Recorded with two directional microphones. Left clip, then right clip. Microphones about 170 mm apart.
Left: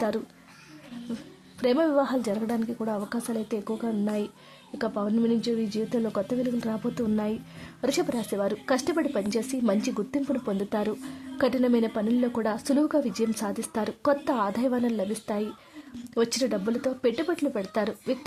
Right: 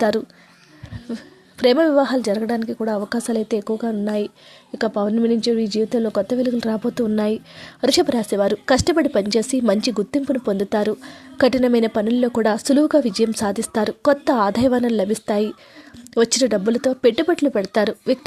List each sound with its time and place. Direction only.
1.5 s a woman's voice: 30° right (ahead or behind)